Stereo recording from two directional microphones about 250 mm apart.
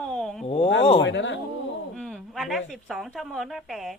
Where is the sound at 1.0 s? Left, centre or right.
Left.